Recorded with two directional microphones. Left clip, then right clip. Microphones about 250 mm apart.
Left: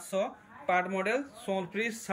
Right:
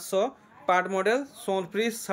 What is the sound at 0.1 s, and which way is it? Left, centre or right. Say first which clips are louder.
Speech: right 6 dB; centre.